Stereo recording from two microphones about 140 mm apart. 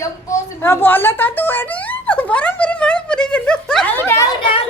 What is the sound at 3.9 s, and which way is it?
Speech, 20° left (ahead or behind).